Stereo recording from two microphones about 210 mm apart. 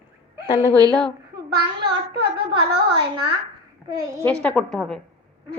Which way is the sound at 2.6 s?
50° right (ahead or behind).